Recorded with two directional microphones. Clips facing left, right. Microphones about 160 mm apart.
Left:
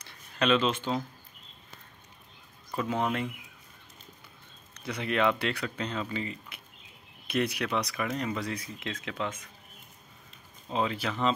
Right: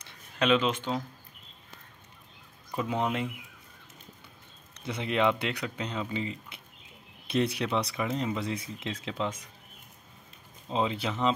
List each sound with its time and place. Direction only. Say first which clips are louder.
0.4 s speech: even; 15° right (ahead or behind)
2.7 s speech: even; 15° right (ahead or behind)
4.7 s speech: even; 25° right (ahead or behind)
10.7 s speech: right 1 dB; 20° right (ahead or behind)